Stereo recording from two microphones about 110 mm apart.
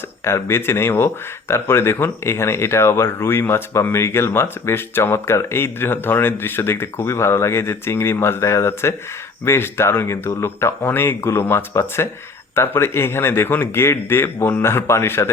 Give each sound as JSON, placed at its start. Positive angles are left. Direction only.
{"t": 0.3, "sound": "speech", "side_deg": 25}